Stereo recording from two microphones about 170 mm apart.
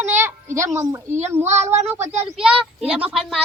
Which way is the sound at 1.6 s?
40° right (ahead or behind).